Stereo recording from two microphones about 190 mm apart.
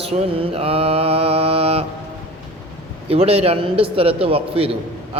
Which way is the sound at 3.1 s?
30° right (ahead or behind).